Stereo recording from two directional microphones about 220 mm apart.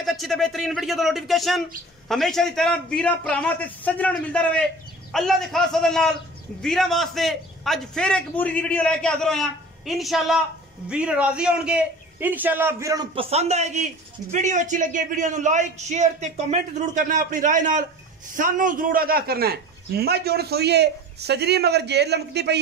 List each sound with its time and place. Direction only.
0.0 s a man's voice: centre (ahead or behind); by 22.6 s 50° right (ahead or behind)